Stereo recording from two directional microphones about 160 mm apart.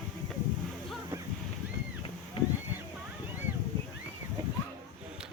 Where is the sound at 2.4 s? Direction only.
35° left (ahead or behind).